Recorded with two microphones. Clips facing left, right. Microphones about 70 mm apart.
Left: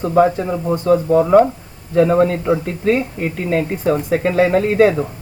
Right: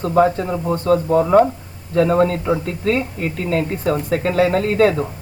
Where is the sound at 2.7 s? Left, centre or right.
Left.